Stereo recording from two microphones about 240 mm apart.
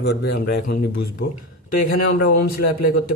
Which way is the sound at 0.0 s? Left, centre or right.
Left.